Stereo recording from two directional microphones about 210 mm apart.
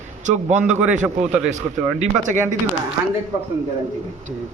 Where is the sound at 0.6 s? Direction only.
5° right (ahead or behind).